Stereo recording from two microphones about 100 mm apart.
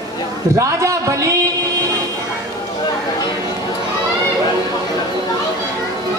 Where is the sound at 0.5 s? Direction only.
30° right (ahead or behind).